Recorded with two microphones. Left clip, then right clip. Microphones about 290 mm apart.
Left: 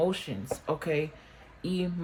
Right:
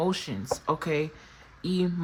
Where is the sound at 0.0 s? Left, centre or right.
Centre.